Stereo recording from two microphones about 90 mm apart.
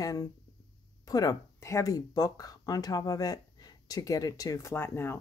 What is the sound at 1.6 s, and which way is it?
Speech, 35° left (ahead or behind).